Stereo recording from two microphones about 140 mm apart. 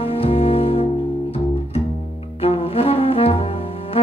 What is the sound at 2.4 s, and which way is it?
Saxophone, 45° left (ahead or behind).